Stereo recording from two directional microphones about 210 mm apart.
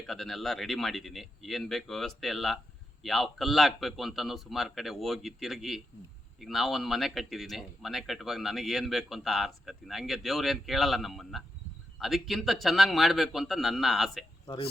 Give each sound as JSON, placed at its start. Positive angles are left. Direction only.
{"t": 0.1, "sound": "speech", "side_deg": 0}
{"t": 14.4, "sound": "speech", "side_deg": 25}